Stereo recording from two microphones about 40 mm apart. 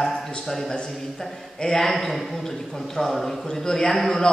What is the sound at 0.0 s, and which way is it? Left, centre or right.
A man's voice, centre.